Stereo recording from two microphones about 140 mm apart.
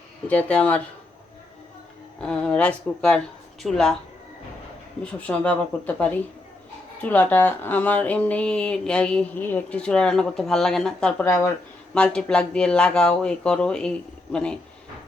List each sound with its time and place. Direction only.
0.3 s speech: 10° left (ahead or behind)
2.2 s speech: 5° left (ahead or behind)
5.2 s speech: 10° left (ahead or behind)
11.3 s speech: 20° left (ahead or behind)
11.9 s speech: 5° left (ahead or behind)